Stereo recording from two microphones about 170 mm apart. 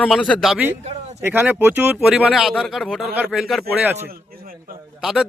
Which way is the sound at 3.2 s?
10° right (ahead or behind).